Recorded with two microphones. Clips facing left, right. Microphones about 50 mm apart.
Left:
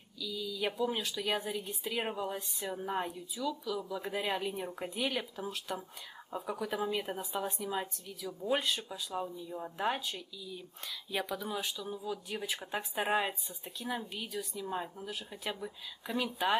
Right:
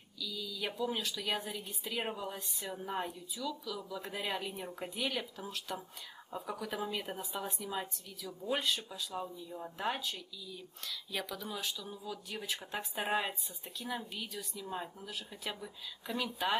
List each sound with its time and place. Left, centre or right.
0.2 s a woman's voice: centre